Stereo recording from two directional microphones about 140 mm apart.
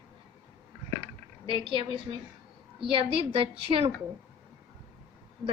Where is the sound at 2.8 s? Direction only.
40° right (ahead or behind).